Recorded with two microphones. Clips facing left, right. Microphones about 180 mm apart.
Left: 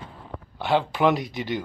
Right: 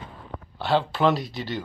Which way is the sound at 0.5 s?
15° left (ahead or behind).